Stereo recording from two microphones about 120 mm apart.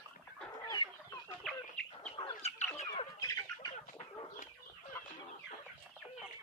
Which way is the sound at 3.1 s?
30° left (ahead or behind).